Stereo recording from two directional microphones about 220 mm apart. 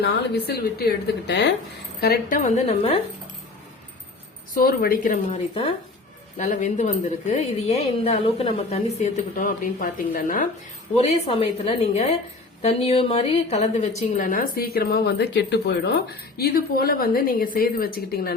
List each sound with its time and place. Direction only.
0.0 s a woman's voice: 45° left (ahead or behind); by 3.0 s 25° left (ahead or behind)
4.5 s a woman's voice: 40° left (ahead or behind)